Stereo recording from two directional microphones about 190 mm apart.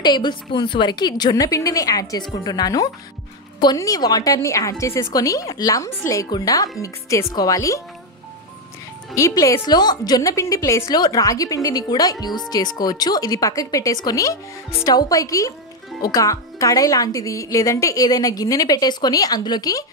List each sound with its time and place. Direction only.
0.0 s a woman's voice: 25° left (ahead or behind)
9.1 s a woman's voice: 15° left (ahead or behind)